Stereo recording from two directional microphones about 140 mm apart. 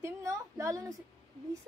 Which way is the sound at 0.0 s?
20° right (ahead or behind).